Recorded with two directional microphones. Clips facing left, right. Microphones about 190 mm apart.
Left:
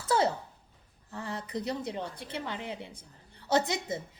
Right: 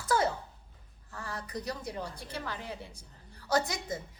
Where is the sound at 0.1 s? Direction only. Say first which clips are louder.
Left 2 dB; 25° left (ahead or behind).